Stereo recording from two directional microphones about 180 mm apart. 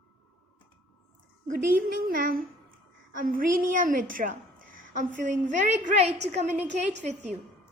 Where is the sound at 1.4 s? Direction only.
50° right (ahead or behind).